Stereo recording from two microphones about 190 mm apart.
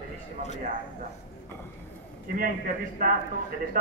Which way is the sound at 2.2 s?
50° right (ahead or behind).